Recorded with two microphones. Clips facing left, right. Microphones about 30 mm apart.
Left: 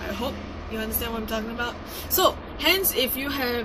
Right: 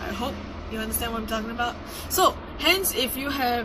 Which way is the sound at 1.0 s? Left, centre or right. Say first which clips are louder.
Right 2 dB; centre.